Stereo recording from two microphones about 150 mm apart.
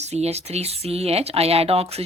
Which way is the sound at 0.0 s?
45° right (ahead or behind).